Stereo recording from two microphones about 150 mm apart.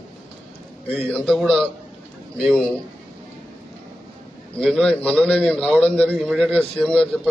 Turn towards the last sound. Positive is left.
turn(degrees=5)  # may be behind; listen again after turning